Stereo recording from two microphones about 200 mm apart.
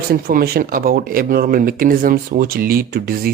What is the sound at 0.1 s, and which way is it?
Speech, 50° right (ahead or behind).